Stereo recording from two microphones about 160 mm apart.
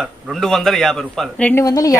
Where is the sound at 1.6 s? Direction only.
20° left (ahead or behind).